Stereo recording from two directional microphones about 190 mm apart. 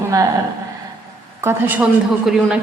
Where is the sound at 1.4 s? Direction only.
10° right (ahead or behind).